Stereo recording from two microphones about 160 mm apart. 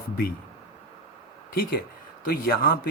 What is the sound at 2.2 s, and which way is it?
Speech, 70° left (ahead or behind).